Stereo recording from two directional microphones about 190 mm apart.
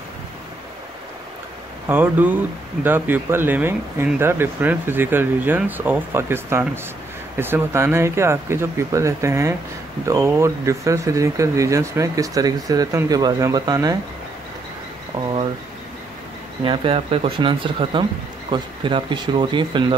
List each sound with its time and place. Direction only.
1.9 s speech: 10° right (ahead or behind)
15.1 s a sound: 20° right (ahead or behind)
16.6 s speech: 25° right (ahead or behind)